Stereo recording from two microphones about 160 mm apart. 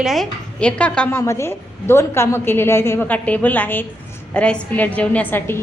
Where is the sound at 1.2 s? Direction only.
15° left (ahead or behind).